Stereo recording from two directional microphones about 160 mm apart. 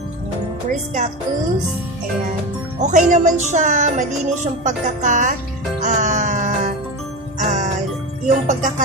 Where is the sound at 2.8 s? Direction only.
50° right (ahead or behind).